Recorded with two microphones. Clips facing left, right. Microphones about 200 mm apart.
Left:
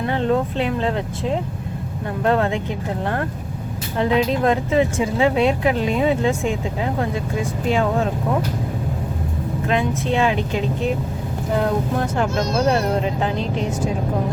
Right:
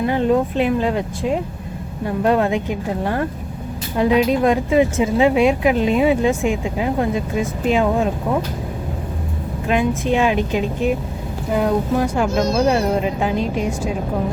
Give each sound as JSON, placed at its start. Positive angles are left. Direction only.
{"t": 0.1, "sound": "speech", "side_deg": -15}
{"t": 7.7, "sound": "speech", "side_deg": -15}
{"t": 9.6, "sound": "speech", "side_deg": -10}